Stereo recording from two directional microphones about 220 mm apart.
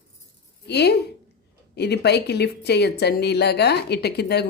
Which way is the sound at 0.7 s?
50° left (ahead or behind).